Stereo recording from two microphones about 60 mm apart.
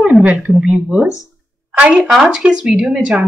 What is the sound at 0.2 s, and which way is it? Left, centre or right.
Speech, right.